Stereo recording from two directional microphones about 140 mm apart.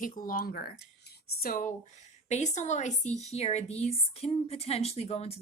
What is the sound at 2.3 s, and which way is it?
A woman's voice, 55° left (ahead or behind).